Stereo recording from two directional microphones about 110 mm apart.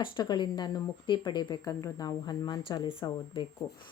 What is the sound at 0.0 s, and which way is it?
Speech, 45° left (ahead or behind).